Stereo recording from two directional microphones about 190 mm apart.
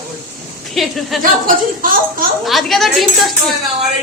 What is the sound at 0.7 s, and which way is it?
Speech, centre (ahead or behind).